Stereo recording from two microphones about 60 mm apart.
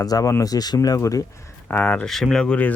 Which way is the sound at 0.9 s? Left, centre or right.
Left.